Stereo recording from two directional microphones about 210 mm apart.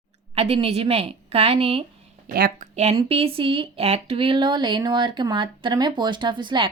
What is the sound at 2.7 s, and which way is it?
A woman's voice, 30° right (ahead or behind).